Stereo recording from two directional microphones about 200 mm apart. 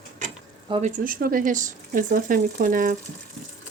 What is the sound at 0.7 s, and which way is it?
Speech, 35° right (ahead or behind).